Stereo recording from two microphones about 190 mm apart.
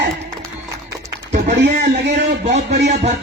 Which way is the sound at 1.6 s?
60° right (ahead or behind).